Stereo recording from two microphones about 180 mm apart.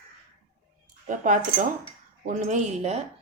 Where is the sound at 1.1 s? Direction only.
45° right (ahead or behind).